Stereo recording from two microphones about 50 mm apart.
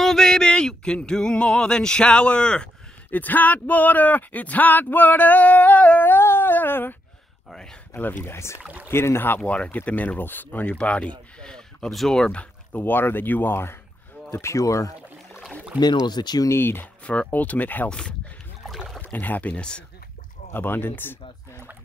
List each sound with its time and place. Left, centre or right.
0.0 s a sound: centre
3.1 s speech: left
6.0 s a sound: left
7.4 s speech: centre
8.2 s speech: left
9.4 s speech: left
10.7 s speech: left
12.4 s speech: left
14.3 s speech: left
15.7 s speech: right
16.4 s speech: left
16.8 s speech: left
17.8 s speech: centre
18.9 s speech: left